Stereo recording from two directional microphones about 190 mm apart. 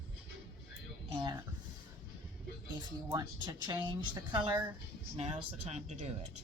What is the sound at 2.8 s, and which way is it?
A woman's voice, 20° right (ahead or behind).